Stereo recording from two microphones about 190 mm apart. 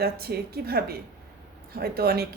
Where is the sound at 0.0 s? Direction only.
55° right (ahead or behind).